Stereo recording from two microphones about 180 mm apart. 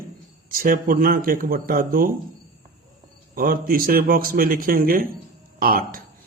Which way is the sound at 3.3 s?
50° right (ahead or behind).